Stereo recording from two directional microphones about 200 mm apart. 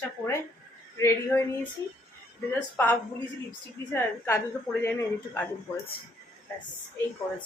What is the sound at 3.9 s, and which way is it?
A woman's voice, 10° left (ahead or behind).